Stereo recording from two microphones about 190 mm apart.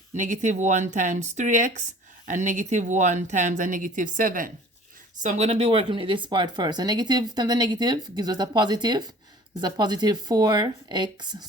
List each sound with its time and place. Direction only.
0.1 s speech: 40° right (ahead or behind); by 11.4 s 25° right (ahead or behind)